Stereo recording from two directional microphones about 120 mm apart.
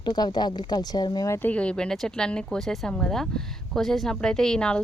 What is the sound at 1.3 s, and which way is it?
Speech, 15° left (ahead or behind).